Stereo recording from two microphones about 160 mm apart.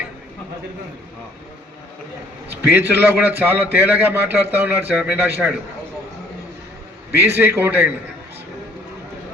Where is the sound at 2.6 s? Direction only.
10° right (ahead or behind).